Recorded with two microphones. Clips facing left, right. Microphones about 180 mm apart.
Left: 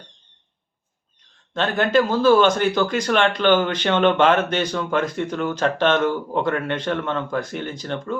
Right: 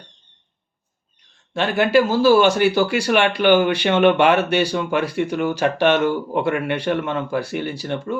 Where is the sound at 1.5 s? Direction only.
10° right (ahead or behind).